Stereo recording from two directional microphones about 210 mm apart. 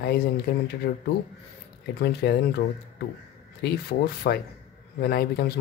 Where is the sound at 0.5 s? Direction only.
50° left (ahead or behind).